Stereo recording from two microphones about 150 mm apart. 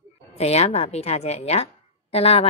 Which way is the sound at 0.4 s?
45° left (ahead or behind).